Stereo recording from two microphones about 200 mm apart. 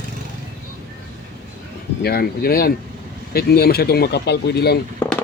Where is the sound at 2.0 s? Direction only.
50° left (ahead or behind).